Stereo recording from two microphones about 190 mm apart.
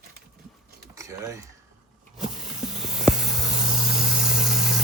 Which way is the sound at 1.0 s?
15° right (ahead or behind).